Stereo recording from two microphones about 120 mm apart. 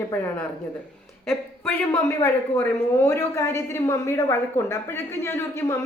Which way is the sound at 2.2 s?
20° left (ahead or behind).